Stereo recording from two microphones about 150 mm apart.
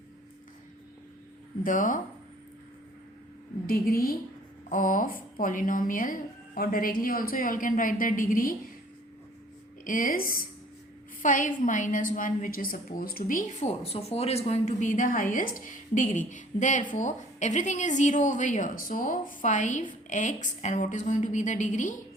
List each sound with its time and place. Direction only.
1.6 s a woman's voice: 60° left (ahead or behind)
3.7 s a woman's voice: 80° left
4.7 s a woman's voice: 60° left (ahead or behind)
9.8 s a woman's voice: 65° left (ahead or behind)
11.2 s a woman's voice: 60° left (ahead or behind)